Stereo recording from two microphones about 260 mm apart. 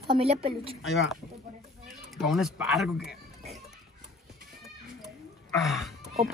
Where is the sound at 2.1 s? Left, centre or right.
Centre.